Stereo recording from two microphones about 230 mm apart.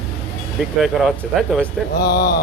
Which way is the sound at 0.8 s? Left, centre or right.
Centre.